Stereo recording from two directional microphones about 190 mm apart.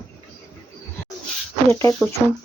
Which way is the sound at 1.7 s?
15° left (ahead or behind).